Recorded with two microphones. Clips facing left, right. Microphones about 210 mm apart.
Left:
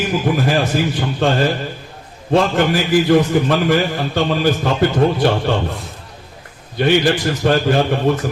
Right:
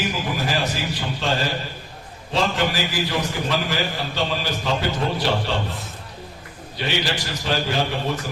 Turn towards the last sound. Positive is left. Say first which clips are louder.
# left 8 dB
turn(degrees=55)  # may be behind; listen again after turning